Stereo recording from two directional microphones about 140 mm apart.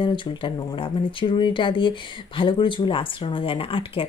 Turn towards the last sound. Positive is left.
turn(degrees=40)  # may be behind; listen again after turning